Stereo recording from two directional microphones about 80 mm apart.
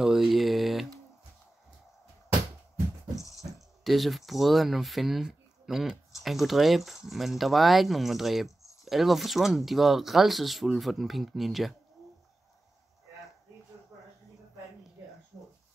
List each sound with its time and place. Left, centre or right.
0.0 s typing: centre
3.3 s speech: centre